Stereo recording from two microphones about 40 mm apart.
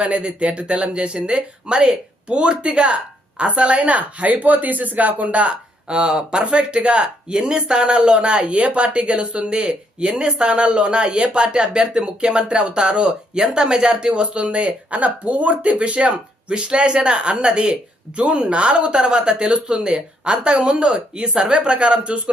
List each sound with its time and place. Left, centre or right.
0.0 s speech: right